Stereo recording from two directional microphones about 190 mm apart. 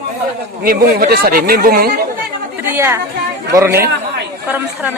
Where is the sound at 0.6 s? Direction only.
50° right (ahead or behind).